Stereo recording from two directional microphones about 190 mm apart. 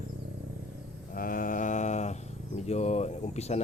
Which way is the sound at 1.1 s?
45° left (ahead or behind).